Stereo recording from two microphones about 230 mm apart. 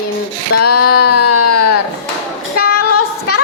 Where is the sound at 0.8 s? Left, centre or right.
Left.